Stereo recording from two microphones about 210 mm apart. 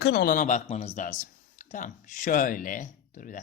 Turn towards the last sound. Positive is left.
turn(degrees=40)  # may be behind; listen again after turning